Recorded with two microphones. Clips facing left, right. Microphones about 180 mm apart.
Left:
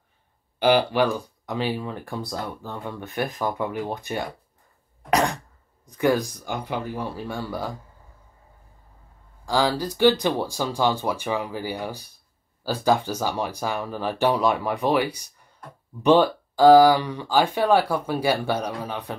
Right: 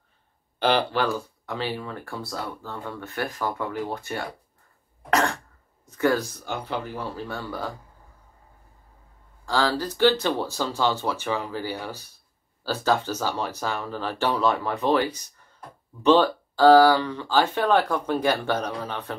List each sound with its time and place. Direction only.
0.6 s speech: 10° left (ahead or behind)
9.5 s speech: 15° left (ahead or behind)